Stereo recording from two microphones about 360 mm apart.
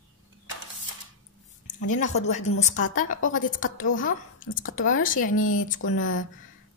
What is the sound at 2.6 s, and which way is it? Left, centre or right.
A woman's voice, left.